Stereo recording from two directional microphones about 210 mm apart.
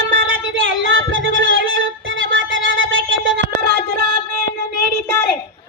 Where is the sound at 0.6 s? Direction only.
65° right (ahead or behind).